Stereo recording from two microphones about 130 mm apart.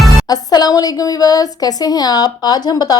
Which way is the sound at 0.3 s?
30° left (ahead or behind).